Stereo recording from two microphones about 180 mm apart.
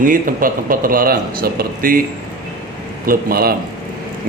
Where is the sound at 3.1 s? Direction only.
55° right (ahead or behind).